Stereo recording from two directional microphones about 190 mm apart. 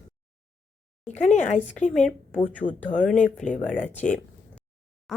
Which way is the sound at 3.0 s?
5° left (ahead or behind).